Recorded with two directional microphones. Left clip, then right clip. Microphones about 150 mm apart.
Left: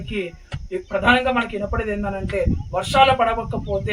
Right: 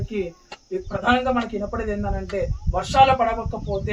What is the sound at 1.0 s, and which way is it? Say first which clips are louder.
A man's voice: left 3 dB; 40° left (ahead or behind).